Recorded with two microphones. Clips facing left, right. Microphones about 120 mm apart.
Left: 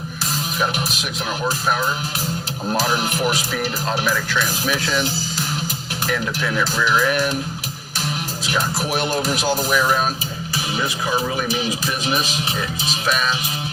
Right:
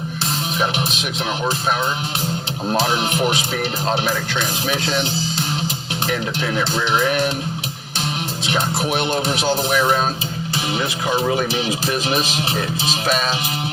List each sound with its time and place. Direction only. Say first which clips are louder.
1.5 s speech: left 1 dB; 25° right (ahead or behind)
6.6 s speech: even; 25° right (ahead or behind)
8.5 s speech: right 1 dB; 25° right (ahead or behind)